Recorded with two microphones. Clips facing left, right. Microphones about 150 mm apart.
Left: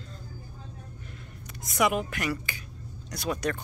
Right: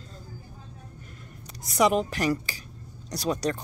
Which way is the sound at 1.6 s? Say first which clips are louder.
Right 4 dB; 35° right (ahead or behind).